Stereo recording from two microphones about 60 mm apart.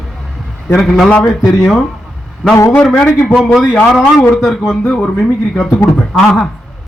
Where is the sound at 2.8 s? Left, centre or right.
Centre.